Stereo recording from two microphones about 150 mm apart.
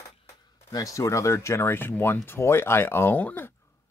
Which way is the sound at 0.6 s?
20° left (ahead or behind).